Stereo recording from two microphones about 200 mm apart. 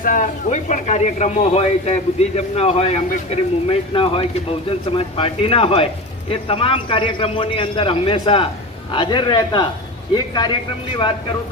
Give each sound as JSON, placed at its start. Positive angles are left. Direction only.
{"t": 0.0, "sound": "a man's voice", "side_deg": 40}